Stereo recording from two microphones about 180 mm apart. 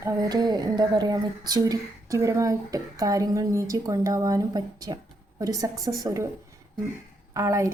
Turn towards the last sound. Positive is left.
turn(degrees=-15)  # may be behind; listen again after turning